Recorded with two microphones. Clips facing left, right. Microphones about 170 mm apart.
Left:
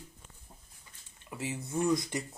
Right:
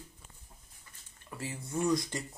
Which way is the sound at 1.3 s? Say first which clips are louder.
Left 2 dB; 20° left (ahead or behind).